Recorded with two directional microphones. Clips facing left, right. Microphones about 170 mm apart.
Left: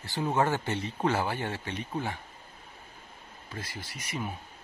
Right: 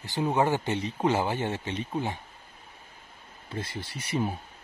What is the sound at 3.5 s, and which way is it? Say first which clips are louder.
Speech: right 6 dB; 25° right (ahead or behind).